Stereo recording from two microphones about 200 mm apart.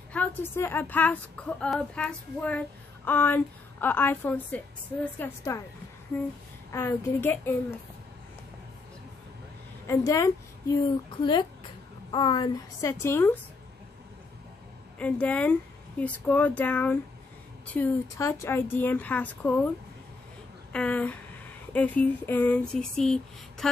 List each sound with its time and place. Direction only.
0.1 s a woman's voice: 10° left (ahead or behind)
9.8 s a woman's voice: 15° left (ahead or behind)
15.0 s a woman's voice: 5° left (ahead or behind)
20.7 s a woman's voice: 5° left (ahead or behind)